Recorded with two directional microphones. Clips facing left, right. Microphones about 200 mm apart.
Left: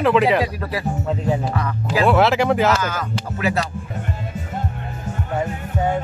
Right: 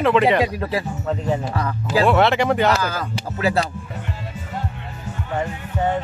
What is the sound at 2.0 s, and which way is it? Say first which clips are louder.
Speech: left 1 dB; centre (ahead or behind).